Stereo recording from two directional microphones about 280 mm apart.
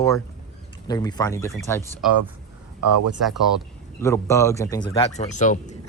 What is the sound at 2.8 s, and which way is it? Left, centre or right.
Speech, right.